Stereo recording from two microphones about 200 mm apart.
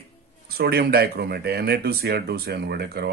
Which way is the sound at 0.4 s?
50° right (ahead or behind).